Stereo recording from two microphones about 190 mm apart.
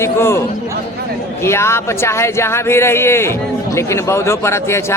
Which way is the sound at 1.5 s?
15° left (ahead or behind).